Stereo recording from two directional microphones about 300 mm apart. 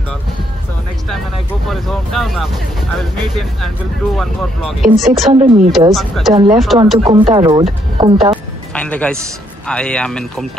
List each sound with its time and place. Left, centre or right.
1.1 s speech: centre
5.3 s speech: right
5.7 s speech: centre
7.0 s speech: centre
8.7 s a man's voice: centre